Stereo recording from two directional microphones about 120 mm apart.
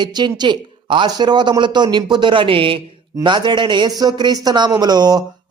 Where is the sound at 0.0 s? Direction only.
40° right (ahead or behind).